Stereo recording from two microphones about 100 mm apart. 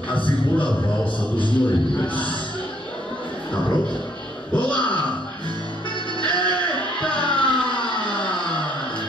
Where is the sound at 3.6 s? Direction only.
55° left (ahead or behind).